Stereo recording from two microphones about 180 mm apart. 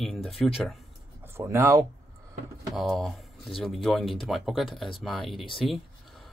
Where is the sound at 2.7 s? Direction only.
Centre (ahead or behind).